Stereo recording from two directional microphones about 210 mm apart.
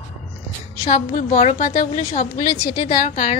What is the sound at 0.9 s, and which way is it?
A woman's voice, 40° left (ahead or behind).